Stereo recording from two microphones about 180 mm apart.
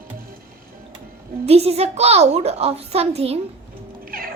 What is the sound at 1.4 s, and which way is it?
A child's voice, 35° right (ahead or behind).